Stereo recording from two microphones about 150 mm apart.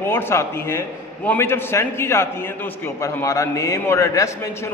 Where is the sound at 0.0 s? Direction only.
15° left (ahead or behind).